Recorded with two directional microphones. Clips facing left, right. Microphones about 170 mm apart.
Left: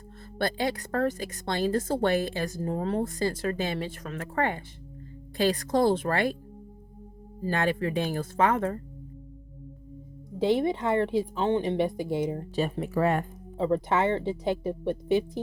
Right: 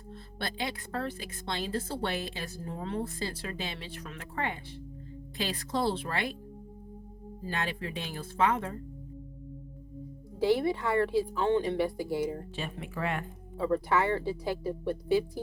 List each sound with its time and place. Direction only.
0.3 s speech: 45° left (ahead or behind)
7.4 s speech: 50° left (ahead or behind)
10.3 s speech: 20° left (ahead or behind)
12.5 s speech: 40° left (ahead or behind)
13.6 s speech: 20° left (ahead or behind)